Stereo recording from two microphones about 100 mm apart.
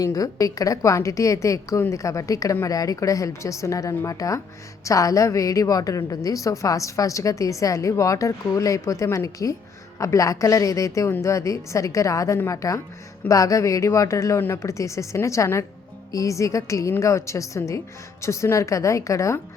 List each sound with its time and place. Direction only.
0.0 s a woman's voice: 35° left (ahead or behind)